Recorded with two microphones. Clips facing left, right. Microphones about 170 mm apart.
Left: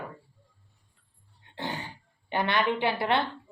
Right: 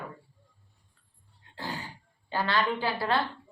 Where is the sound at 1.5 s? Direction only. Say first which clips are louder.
Left 2 dB; 20° left (ahead or behind).